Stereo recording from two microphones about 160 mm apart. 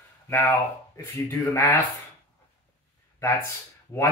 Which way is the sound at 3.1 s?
15° left (ahead or behind).